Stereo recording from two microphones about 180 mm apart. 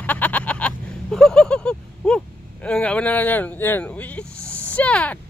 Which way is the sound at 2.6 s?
5° left (ahead or behind).